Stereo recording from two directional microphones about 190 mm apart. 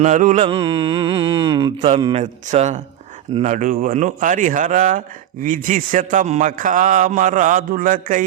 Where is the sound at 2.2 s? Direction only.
40° right (ahead or behind).